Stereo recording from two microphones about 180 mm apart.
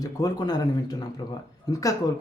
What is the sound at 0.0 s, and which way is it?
A man's voice, 20° left (ahead or behind).